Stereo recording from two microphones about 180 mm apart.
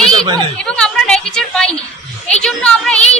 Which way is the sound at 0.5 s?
5° left (ahead or behind).